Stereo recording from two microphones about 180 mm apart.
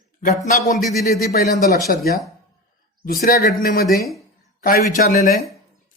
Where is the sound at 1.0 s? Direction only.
50° left (ahead or behind).